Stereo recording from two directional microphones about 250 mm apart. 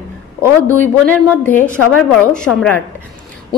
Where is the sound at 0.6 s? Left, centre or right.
Centre.